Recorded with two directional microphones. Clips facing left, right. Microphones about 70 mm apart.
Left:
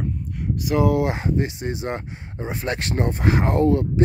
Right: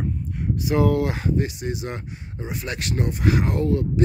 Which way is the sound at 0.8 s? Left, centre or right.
Left.